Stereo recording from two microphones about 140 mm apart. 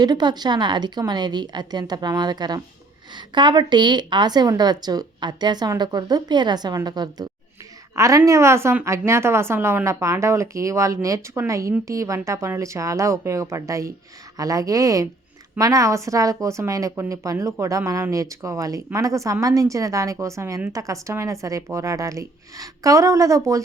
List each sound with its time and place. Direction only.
0.0 s a woman's voice: 30° right (ahead or behind)